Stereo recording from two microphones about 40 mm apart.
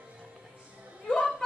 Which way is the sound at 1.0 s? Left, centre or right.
Centre.